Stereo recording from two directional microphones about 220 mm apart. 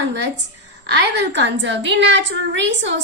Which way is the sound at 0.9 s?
50° right (ahead or behind).